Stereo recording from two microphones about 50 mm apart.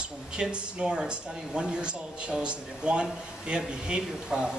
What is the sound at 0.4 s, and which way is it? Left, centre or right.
Speech, centre.